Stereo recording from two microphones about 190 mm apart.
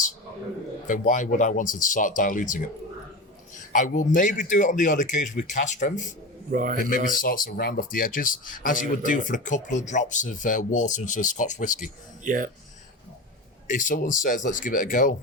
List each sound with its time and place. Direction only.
0.9 s speech: 40° left (ahead or behind)
3.7 s speech: 45° left (ahead or behind)
6.5 s a man's voice: 45° right (ahead or behind)
6.9 s speech: 45° left (ahead or behind)
12.2 s speech: 45° right (ahead or behind)
13.7 s speech: 45° left (ahead or behind)